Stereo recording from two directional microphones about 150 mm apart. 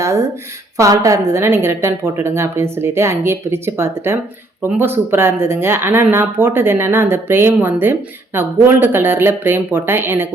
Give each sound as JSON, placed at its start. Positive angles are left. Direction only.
{"t": 0.8, "sound": "speech", "side_deg": -20}